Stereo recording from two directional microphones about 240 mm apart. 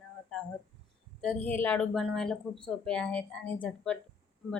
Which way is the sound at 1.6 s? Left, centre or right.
Centre.